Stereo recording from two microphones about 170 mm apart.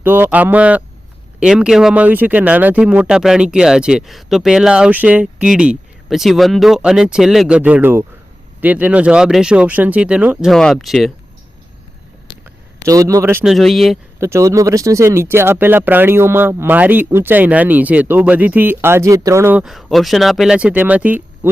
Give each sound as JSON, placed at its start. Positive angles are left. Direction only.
{"t": 0.0, "sound": "speech", "side_deg": -10}
{"t": 10.5, "sound": "speech", "side_deg": 5}
{"t": 12.8, "sound": "a man's voice", "side_deg": -20}
{"t": 13.5, "sound": "speech", "side_deg": 0}
{"t": 14.2, "sound": "speech", "side_deg": -15}